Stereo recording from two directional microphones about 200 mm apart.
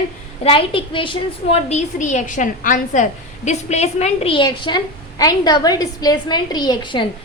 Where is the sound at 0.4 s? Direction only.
25° left (ahead or behind).